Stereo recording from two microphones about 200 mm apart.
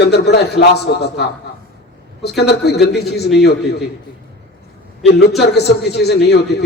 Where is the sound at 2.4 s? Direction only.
55° left (ahead or behind).